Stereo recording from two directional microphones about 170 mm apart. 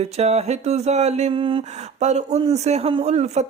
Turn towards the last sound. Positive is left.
turn(degrees=-40)  # may be behind; listen again after turning